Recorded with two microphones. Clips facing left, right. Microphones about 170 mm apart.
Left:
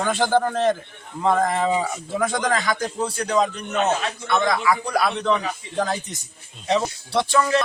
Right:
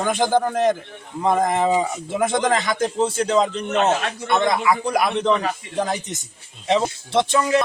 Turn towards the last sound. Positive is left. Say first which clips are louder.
# right 2 dB
turn(degrees=-20)  # may be behind; listen again after turning